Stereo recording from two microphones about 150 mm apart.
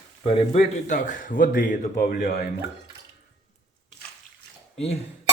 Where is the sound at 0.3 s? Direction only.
45° left (ahead or behind); by 2.5 s 75° left (ahead or behind).